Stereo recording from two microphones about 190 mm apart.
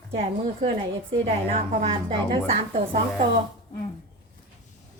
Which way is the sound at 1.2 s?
30° right (ahead or behind).